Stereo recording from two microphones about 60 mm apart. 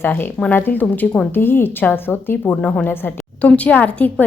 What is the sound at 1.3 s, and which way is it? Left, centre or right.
A woman's voice, left.